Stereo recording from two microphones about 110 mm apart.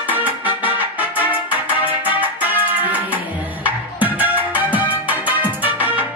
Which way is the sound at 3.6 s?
15° right (ahead or behind).